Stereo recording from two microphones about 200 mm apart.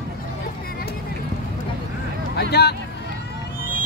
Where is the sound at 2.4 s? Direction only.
55° left (ahead or behind).